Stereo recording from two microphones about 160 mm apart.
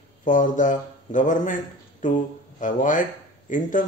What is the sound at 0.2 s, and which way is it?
A man's voice, 55° left (ahead or behind).